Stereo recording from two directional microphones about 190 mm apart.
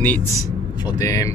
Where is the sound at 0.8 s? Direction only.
20° left (ahead or behind).